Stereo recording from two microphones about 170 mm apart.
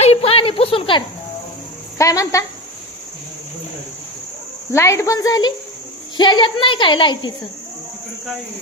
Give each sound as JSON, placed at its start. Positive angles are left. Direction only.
{"t": 0.0, "sound": "a sound", "side_deg": 35}
{"t": 2.0, "sound": "speech", "side_deg": 20}
{"t": 4.7, "sound": "speech", "side_deg": 15}